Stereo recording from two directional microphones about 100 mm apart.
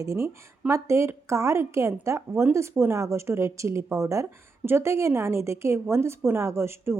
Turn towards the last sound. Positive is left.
turn(degrees=-25)  # may be behind; listen again after turning